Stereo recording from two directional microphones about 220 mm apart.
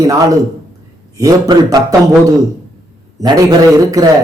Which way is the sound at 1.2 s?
15° right (ahead or behind).